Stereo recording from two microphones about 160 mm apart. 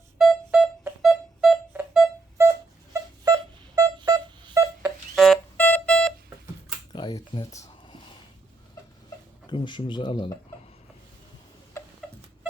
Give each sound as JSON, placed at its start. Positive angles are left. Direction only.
{"t": 0.2, "sound": "pulse", "side_deg": -5}
{"t": 2.9, "sound": "a sound", "side_deg": -25}
{"t": 4.8, "sound": "music", "side_deg": 0}
{"t": 6.9, "sound": "speech", "side_deg": 30}
{"t": 9.5, "sound": "speech", "side_deg": 30}
{"t": 11.8, "sound": "a sound", "side_deg": 20}